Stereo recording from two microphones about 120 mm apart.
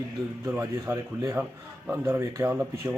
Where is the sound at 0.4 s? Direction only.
20° right (ahead or behind).